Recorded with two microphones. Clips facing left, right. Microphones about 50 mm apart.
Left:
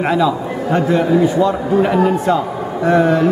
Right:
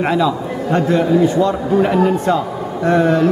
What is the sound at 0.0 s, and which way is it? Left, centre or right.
A man's voice, centre.